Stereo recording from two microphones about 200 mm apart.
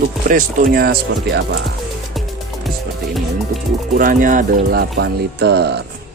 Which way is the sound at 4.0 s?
45° right (ahead or behind).